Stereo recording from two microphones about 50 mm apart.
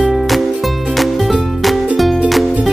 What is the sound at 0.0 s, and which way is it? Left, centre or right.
Music, centre.